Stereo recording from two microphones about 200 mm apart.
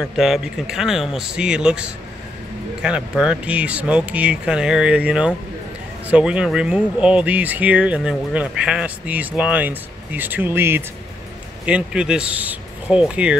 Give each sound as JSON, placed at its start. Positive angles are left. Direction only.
{"t": 0.0, "sound": "speech", "side_deg": 0}